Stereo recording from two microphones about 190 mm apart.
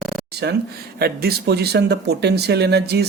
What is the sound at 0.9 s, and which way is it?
Speech, 55° right (ahead or behind).